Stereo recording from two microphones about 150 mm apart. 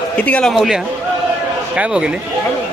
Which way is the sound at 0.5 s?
Centre (ahead or behind).